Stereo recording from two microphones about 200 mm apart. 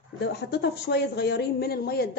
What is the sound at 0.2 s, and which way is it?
A woman's voice, 55° left (ahead or behind).